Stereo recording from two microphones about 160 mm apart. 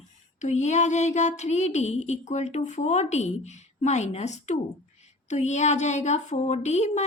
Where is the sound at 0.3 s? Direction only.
45° left (ahead or behind).